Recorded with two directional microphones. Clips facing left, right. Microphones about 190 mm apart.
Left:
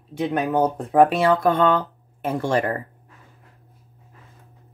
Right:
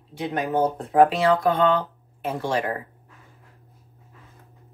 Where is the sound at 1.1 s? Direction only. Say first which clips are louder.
Left 2 dB; 55° left (ahead or behind).